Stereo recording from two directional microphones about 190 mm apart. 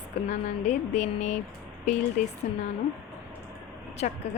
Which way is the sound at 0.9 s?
35° left (ahead or behind).